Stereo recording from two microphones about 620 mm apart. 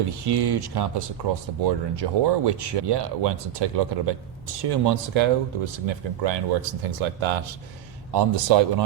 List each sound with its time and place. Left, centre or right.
0.1 s speech: right